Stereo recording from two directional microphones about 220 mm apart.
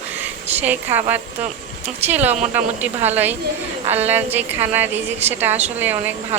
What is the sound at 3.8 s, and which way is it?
Speech, 30° right (ahead or behind).